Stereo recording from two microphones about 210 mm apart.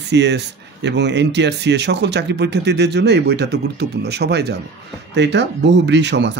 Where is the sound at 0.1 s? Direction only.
55° right (ahead or behind).